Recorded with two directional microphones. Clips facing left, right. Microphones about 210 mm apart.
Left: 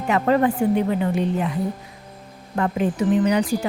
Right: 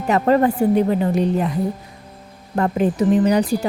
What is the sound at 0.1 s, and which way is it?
Speech, 40° right (ahead or behind).